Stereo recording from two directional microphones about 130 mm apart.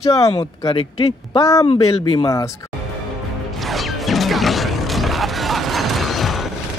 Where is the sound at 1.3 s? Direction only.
25° left (ahead or behind).